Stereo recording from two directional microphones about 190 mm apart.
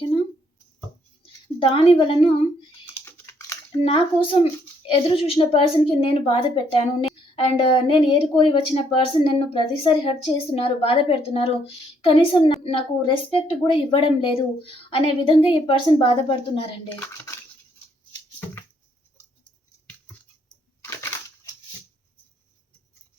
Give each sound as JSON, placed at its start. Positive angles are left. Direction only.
{"t": 1.7, "sound": "speech", "side_deg": 30}
{"t": 2.8, "sound": "typing", "side_deg": 15}
{"t": 3.8, "sound": "speech", "side_deg": 30}
{"t": 16.9, "sound": "dishes", "side_deg": 10}
{"t": 20.8, "sound": "a sound", "side_deg": 15}